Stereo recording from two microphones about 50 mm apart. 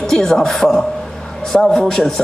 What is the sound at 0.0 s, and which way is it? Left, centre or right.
A man's voice, centre.